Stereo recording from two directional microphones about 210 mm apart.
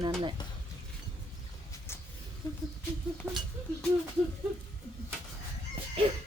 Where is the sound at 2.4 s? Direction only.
15° left (ahead or behind).